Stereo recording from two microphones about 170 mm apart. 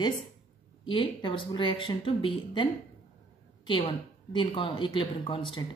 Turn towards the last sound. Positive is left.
turn(degrees=30)  # may be behind; listen again after turning